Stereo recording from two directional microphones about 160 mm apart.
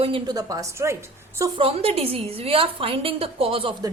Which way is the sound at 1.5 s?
35° right (ahead or behind).